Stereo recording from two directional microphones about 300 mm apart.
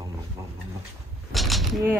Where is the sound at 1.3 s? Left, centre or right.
Centre.